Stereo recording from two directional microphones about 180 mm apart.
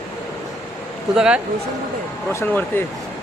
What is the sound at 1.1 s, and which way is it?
Speech, 5° right (ahead or behind).